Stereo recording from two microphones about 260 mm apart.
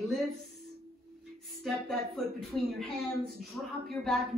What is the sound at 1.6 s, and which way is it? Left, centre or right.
A woman's voice, centre.